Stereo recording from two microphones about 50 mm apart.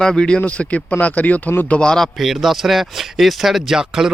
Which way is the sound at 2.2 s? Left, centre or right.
Centre.